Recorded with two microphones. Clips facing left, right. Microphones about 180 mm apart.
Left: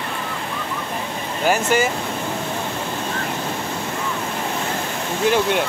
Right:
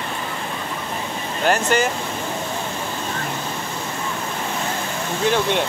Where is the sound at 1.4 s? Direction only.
10° left (ahead or behind).